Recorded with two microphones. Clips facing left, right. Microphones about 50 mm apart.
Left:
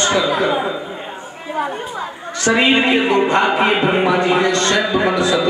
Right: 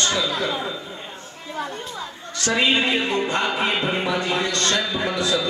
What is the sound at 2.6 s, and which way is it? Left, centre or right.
Speech, left.